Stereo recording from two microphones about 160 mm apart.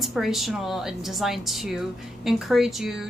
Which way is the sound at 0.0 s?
Centre (ahead or behind).